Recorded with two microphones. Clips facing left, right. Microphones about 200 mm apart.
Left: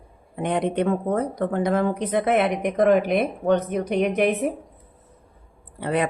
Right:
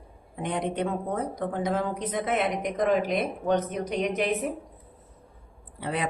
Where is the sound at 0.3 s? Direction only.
65° left (ahead or behind).